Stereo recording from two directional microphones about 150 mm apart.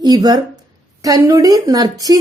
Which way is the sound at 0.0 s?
25° right (ahead or behind).